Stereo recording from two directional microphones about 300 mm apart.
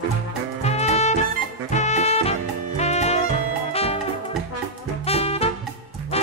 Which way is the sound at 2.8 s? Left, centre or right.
Left.